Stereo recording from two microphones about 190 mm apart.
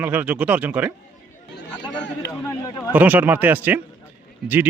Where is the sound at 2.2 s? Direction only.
15° left (ahead or behind).